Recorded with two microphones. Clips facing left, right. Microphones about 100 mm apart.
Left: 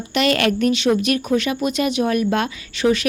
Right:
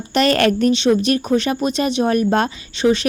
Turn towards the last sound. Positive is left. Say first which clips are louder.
# right 2 dB
turn(degrees=-25)  # may be behind; listen again after turning